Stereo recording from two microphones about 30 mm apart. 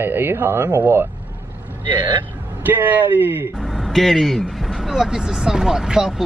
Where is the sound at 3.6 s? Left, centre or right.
Centre.